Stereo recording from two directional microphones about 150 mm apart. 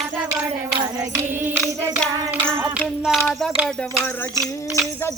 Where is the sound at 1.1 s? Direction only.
10° right (ahead or behind).